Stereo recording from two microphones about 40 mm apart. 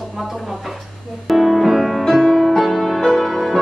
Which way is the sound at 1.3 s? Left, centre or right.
Centre.